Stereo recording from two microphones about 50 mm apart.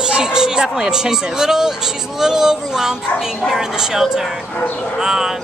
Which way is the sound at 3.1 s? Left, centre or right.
Centre.